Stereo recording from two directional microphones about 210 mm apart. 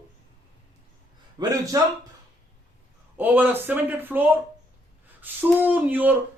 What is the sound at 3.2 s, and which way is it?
Speech, 10° right (ahead or behind).